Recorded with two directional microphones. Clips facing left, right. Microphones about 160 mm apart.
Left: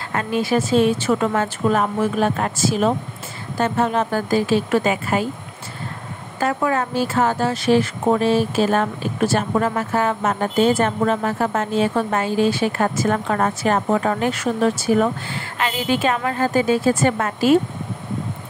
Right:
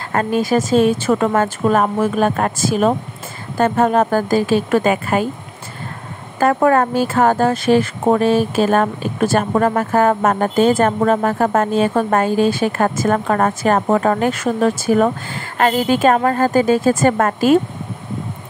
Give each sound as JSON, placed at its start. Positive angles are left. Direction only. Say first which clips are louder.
{"t": 0.1, "sound": "speech", "louder": "right 4 dB", "side_deg": -45}
{"t": 6.4, "sound": "speech", "louder": "right 7 dB", "side_deg": -55}